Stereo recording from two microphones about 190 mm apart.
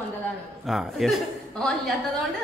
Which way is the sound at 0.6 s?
Centre (ahead or behind).